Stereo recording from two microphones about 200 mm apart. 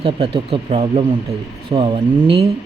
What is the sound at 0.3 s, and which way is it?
Speech, 30° right (ahead or behind).